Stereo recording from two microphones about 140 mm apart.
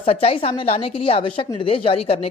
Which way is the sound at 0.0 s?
45° left (ahead or behind).